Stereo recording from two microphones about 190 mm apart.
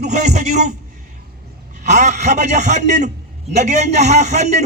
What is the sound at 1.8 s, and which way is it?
A man's voice, 35° right (ahead or behind).